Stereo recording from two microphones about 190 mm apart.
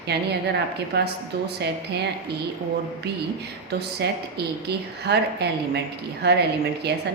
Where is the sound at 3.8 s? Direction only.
60° right (ahead or behind).